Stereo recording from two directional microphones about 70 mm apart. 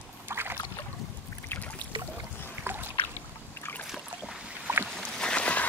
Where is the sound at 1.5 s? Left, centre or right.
Left.